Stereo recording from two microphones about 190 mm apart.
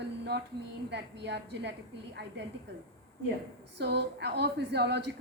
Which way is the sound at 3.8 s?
60° right (ahead or behind).